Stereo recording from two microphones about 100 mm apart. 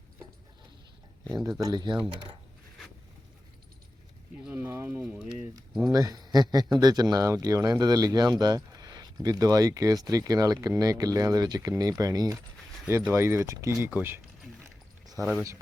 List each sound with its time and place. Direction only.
1.5 s speech: 35° right (ahead or behind)
4.5 s speech: 20° right (ahead or behind)
5.9 s speech: 40° right (ahead or behind)
13.1 s speech: 25° right (ahead or behind)
15.2 s speech: centre (ahead or behind)